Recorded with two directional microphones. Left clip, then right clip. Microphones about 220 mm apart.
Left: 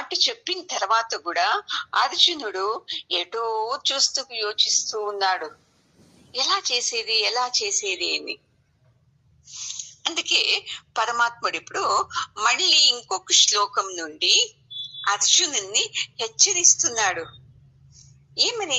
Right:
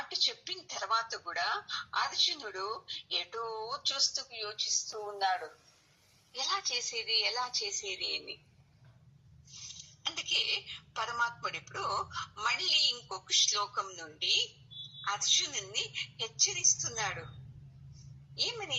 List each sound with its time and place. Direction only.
0.0 s speech: 40° left (ahead or behind)
9.5 s speech: 45° left (ahead or behind)
18.3 s speech: 45° left (ahead or behind)